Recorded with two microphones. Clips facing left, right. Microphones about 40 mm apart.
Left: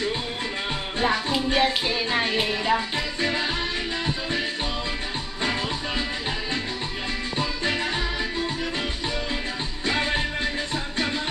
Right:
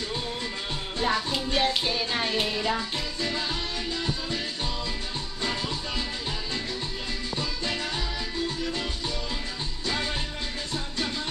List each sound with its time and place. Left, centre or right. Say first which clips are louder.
1.0 s music: left 3 dB; centre
3.2 s music: left 5 dB; left
7.3 s music: left 5 dB; left
9.8 s music: left 6 dB; left